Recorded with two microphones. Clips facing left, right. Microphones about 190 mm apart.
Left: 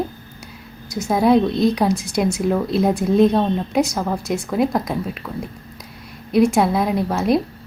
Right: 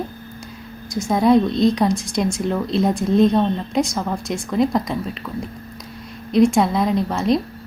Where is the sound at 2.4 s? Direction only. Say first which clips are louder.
Left 2 dB; 5° left (ahead or behind).